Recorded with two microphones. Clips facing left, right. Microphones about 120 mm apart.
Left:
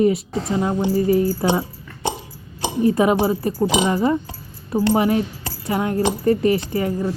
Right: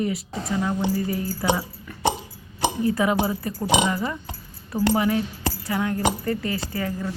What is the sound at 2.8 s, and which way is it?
A woman's voice, 25° left (ahead or behind).